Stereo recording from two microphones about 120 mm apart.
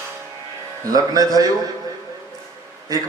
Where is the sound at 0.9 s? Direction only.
30° right (ahead or behind).